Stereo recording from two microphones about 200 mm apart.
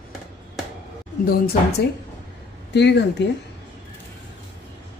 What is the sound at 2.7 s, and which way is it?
Speech, 60° left (ahead or behind).